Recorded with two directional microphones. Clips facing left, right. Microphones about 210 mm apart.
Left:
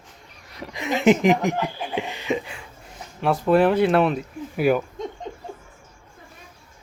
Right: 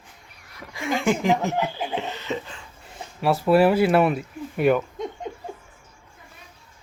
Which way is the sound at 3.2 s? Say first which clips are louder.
Even; 5° right (ahead or behind).